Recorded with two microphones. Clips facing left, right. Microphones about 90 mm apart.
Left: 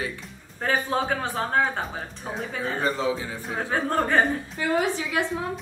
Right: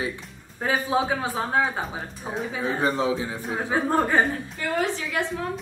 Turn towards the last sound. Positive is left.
turn(degrees=15)  # may be behind; listen again after turning